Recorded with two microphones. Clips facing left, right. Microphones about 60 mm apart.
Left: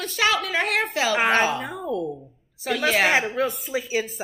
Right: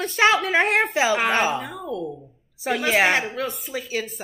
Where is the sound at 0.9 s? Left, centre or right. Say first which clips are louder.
Even; centre.